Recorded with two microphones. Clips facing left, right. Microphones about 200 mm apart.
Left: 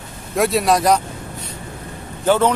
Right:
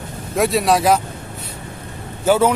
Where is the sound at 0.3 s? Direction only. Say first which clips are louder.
Even; centre (ahead or behind).